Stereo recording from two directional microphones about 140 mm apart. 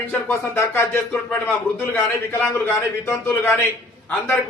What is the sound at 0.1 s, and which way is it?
Speech, 15° left (ahead or behind).